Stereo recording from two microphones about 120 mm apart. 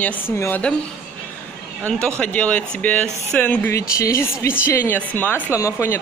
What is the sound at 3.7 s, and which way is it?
Speech, 25° left (ahead or behind).